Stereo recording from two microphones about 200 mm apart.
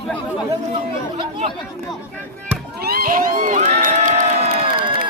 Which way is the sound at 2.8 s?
50° right (ahead or behind).